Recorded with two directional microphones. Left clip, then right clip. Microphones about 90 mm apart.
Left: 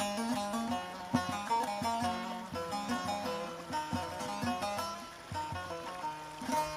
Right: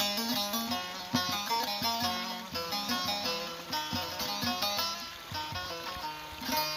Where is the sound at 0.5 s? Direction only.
25° left (ahead or behind).